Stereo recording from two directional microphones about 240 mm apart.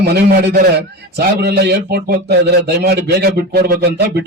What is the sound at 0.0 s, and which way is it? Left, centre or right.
Speech, right.